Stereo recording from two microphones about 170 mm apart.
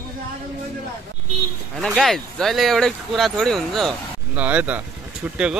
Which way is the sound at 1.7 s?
Centre (ahead or behind).